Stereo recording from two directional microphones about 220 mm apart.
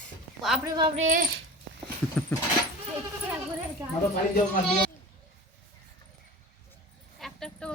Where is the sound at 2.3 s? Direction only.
5° left (ahead or behind).